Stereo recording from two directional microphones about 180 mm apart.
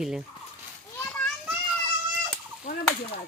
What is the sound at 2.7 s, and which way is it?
Fowl, 40° left (ahead or behind).